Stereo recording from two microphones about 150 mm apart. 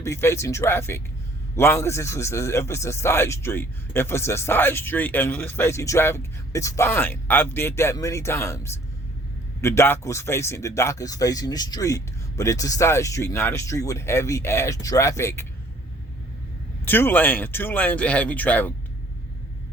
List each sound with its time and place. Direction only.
0.0 s speech: 20° left (ahead or behind)
16.8 s speech: 15° left (ahead or behind)